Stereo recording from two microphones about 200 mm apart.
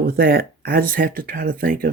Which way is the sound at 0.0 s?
50° right (ahead or behind).